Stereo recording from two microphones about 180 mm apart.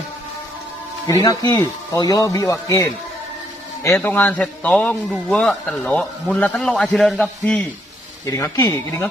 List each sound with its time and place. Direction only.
1.2 s speech: 20° left (ahead or behind); by 7.6 s 5° left (ahead or behind)
8.3 s speech: 20° left (ahead or behind)